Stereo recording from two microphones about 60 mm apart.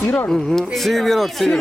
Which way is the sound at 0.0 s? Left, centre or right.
Left.